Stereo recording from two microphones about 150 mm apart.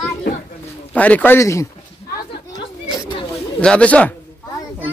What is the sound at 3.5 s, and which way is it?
Speech, 10° left (ahead or behind).